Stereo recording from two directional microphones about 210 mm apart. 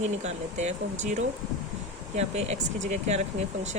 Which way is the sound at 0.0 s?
35° right (ahead or behind).